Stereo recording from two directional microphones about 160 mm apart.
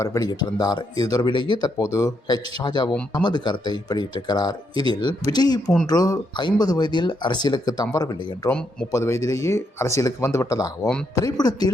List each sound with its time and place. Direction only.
0.0 s speech: 20° left (ahead or behind)
8.4 s speech: 5° left (ahead or behind)
8.9 s speech: 20° left (ahead or behind)